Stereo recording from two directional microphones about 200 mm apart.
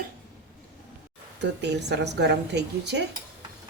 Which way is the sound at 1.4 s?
60° right (ahead or behind).